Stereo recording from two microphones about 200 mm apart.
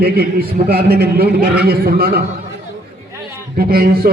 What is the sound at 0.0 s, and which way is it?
A man's voice, 50° right (ahead or behind).